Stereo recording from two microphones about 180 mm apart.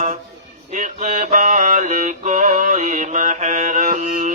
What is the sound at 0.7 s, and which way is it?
Music, 45° right (ahead or behind).